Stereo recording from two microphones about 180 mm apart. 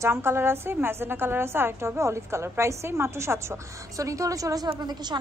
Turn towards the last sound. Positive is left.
turn(degrees=-25)  # may be behind; listen again after turning